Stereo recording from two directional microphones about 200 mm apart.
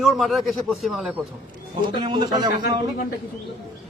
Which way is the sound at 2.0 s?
25° right (ahead or behind).